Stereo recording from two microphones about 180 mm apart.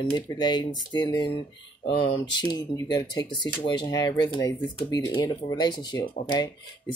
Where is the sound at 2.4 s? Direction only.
20° left (ahead or behind).